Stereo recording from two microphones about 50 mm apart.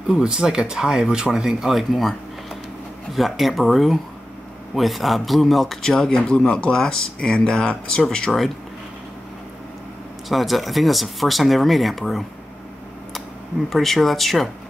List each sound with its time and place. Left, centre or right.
0.1 s speech: centre
3.2 s speech: centre
10.2 s speech: centre
13.7 s speech: centre